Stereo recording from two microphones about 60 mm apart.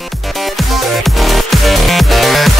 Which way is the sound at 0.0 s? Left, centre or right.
Centre.